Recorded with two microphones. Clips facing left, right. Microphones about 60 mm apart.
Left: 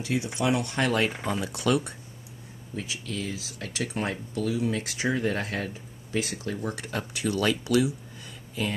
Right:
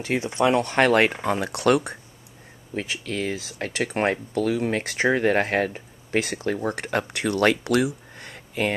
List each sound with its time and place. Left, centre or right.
0.0 s speech: right
1.2 s speech: right
1.5 s speech: right